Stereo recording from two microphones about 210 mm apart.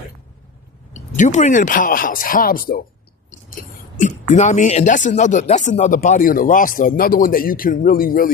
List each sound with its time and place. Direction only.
0.9 s speech: 35° left (ahead or behind)
3.9 s speech: 35° left (ahead or behind)